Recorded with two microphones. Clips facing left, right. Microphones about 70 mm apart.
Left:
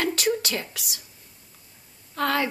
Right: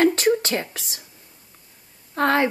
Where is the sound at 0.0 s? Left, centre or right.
Right.